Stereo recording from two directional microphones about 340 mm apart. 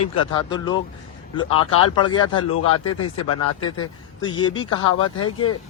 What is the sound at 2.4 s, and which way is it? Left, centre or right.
Speech, left.